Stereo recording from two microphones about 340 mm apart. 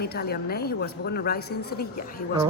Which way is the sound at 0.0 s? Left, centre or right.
Left.